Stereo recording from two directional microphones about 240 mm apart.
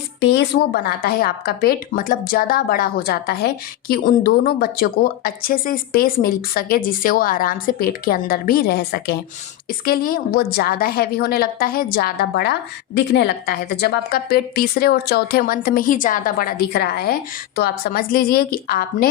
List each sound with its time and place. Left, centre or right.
0.2 s a woman's voice: left